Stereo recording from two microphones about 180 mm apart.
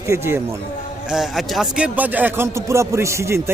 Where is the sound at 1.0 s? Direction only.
5° right (ahead or behind).